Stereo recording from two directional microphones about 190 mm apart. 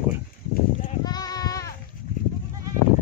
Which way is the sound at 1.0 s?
20° left (ahead or behind).